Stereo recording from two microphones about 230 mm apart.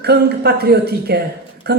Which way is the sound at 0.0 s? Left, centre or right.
Right.